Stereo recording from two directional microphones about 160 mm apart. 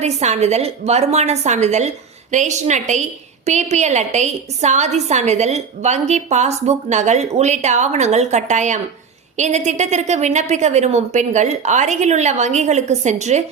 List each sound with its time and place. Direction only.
0.0 s a woman's voice: 45° right (ahead or behind)